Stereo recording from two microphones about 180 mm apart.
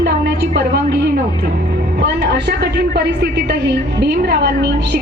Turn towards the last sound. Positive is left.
turn(degrees=-65)  # may be behind; listen again after turning